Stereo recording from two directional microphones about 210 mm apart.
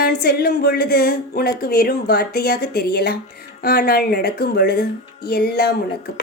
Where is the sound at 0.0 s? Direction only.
50° left (ahead or behind).